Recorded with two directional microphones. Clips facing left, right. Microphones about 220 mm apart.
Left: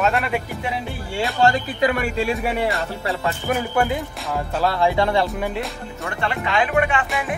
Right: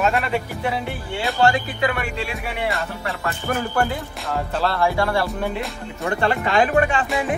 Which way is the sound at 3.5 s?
15° left (ahead or behind).